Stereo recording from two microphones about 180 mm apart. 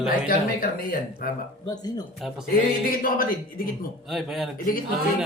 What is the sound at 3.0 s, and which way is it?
Speech, 50° left (ahead or behind).